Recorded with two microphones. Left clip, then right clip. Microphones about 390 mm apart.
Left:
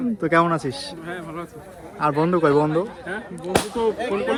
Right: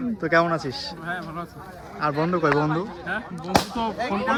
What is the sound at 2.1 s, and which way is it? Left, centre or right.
Speech, left.